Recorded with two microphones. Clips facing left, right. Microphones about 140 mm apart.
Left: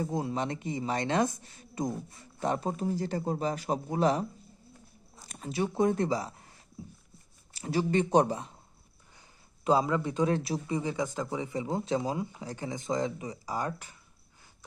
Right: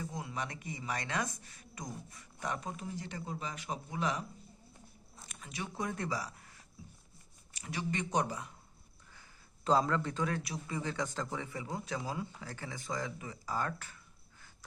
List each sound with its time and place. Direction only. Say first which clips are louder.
0.0 s speech: left 9 dB; 35° left (ahead or behind)
5.3 s speech: left 12 dB; 35° left (ahead or behind)
9.6 s a man's voice: left 4 dB; 10° left (ahead or behind)